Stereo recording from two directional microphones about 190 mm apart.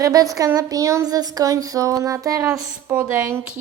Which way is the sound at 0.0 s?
20° right (ahead or behind).